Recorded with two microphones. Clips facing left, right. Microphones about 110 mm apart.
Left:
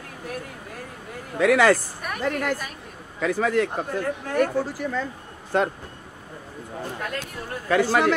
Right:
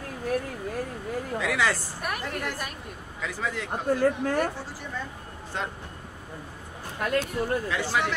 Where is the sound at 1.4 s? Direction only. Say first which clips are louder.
Left 10 dB; 50° left (ahead or behind).